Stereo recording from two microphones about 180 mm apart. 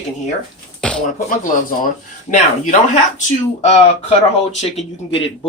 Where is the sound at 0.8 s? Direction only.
5° left (ahead or behind).